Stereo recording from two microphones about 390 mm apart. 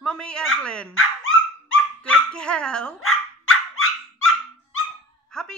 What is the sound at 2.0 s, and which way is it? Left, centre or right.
Speech, centre.